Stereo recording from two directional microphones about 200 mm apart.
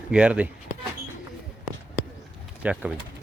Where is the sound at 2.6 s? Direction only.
5° right (ahead or behind).